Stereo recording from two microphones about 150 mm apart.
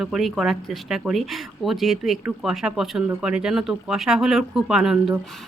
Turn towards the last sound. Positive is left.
turn(degrees=-5)  # may be behind; listen again after turning